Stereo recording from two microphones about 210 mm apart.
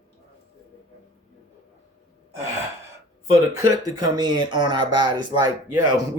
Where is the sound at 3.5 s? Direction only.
20° right (ahead or behind).